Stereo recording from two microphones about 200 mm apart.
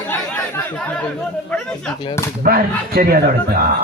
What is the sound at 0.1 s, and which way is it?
Chatter, 10° left (ahead or behind).